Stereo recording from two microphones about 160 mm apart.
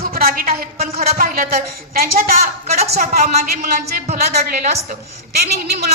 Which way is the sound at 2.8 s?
40° right (ahead or behind).